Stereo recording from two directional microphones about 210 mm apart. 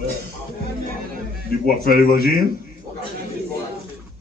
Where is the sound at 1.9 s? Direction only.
45° left (ahead or behind).